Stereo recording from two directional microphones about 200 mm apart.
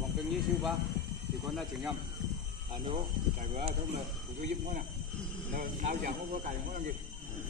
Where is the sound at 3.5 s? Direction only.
35° right (ahead or behind).